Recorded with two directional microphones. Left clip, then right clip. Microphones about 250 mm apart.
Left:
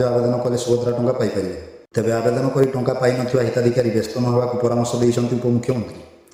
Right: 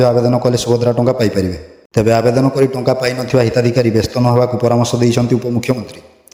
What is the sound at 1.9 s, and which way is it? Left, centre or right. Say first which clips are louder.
A man's voice: right 7 dB; right.